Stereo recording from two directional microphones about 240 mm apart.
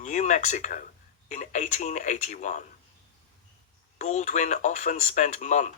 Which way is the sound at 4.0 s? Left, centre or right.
Left.